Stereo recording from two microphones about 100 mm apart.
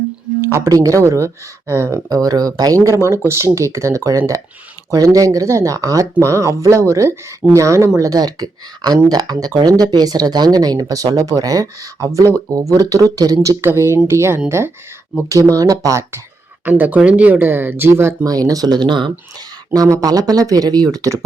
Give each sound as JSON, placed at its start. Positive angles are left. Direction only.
{"t": 0.4, "sound": "speech", "side_deg": -30}
{"t": 13.6, "sound": "speech", "side_deg": -25}
{"t": 15.5, "sound": "speech", "side_deg": -35}
{"t": 16.6, "sound": "speech", "side_deg": -15}
{"t": 18.3, "sound": "speech", "side_deg": -40}
{"t": 19.7, "sound": "speech", "side_deg": -35}